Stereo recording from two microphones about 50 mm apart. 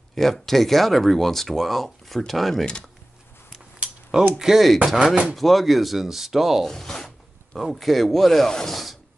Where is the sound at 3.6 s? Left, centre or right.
Centre.